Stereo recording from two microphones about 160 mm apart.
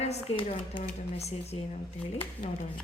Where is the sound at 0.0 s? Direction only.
40° left (ahead or behind).